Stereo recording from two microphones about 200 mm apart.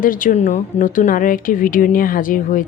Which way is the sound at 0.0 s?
45° left (ahead or behind).